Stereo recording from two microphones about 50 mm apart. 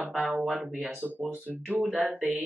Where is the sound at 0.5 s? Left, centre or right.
Right.